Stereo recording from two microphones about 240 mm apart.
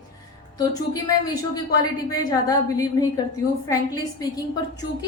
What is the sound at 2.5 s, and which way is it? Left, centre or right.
A woman's voice, centre.